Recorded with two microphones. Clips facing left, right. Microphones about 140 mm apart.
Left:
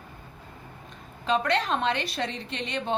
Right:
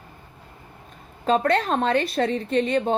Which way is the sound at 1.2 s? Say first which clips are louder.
Right 5 dB; 40° right (ahead or behind).